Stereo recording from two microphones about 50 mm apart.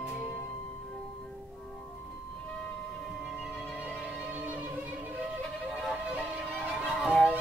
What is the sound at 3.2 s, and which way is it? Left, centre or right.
Music, centre.